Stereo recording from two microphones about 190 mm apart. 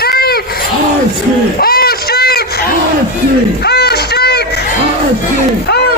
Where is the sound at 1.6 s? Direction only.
55° left (ahead or behind).